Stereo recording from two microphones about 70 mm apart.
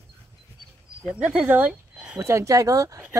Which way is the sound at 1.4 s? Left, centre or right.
Right.